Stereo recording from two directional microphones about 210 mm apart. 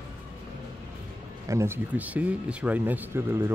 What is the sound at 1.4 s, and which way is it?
Speech, 10° right (ahead or behind).